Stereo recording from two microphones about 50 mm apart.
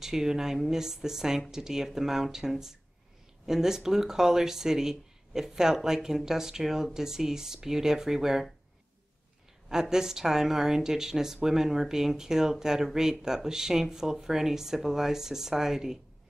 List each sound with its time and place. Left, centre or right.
0.0 s speech: centre
9.7 s speech: centre